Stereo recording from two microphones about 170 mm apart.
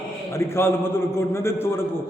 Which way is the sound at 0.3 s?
15° left (ahead or behind).